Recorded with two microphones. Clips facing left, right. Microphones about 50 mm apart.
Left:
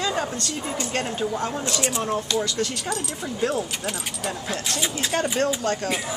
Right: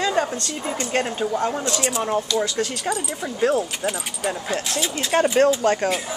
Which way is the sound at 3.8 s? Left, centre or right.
Centre.